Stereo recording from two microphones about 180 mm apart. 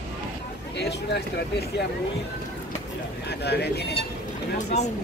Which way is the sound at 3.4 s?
65° left (ahead or behind).